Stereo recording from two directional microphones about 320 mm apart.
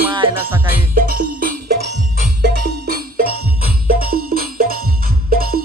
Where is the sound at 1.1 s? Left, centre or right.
Right.